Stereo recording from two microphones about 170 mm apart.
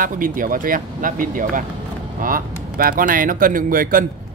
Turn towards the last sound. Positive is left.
turn(degrees=-55)  # may be behind; listen again after turning